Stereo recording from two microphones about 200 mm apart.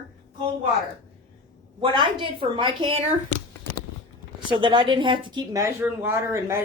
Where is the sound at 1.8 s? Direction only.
25° right (ahead or behind).